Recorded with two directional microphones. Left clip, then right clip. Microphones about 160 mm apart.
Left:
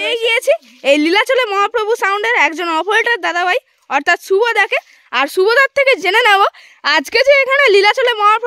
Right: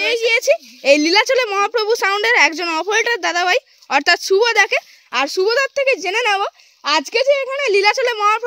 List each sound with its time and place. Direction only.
0.0 s a sound: 5° left (ahead or behind)
0.3 s a woman's voice: 15° left (ahead or behind); by 7.8 s 35° left (ahead or behind)
7.8 s a woman's voice: 20° left (ahead or behind)